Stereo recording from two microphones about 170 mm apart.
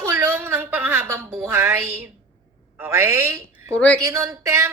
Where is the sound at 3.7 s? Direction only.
10° left (ahead or behind).